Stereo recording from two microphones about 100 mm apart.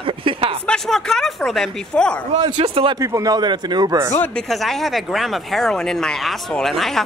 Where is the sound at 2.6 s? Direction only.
65° right (ahead or behind).